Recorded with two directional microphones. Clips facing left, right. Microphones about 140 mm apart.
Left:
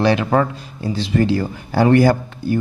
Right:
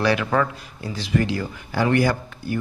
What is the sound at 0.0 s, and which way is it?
Speech, 25° left (ahead or behind).